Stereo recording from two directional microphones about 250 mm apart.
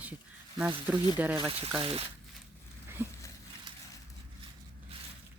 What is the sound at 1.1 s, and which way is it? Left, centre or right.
Speech, centre.